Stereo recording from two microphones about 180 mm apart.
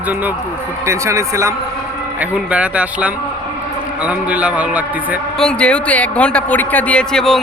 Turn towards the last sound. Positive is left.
turn(degrees=5)  # may be behind; listen again after turning